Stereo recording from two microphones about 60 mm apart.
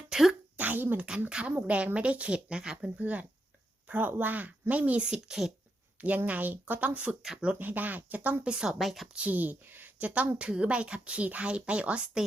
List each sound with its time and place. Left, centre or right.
0.1 s a sound: centre
0.5 s a sound: right
1.3 s speech: centre
3.0 s speech: right; by 5.5 s centre
6.0 s speech: right
8.4 s speech: centre
9.1 s speech: right